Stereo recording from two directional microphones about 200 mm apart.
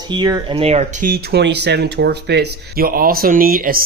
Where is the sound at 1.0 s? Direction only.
50° right (ahead or behind).